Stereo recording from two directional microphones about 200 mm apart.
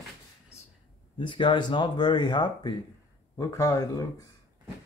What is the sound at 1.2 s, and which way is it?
Speech, 25° left (ahead or behind).